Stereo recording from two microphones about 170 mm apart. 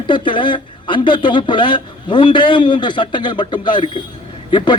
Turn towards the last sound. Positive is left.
turn(degrees=25)  # may be behind; listen again after turning